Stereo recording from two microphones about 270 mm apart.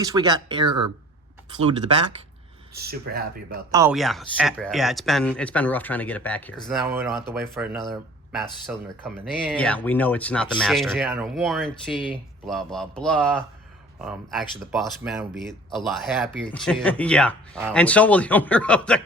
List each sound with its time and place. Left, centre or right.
0.0 s speech: centre
2.7 s speech: right
3.7 s speech: centre
3.9 s speech: centre
7.1 s speech: centre
7.6 s speech: centre